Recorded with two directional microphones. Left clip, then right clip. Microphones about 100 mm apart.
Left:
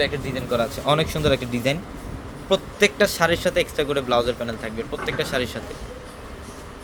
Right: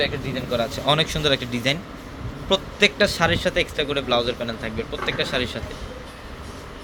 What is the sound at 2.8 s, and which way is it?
Speech, 40° left (ahead or behind).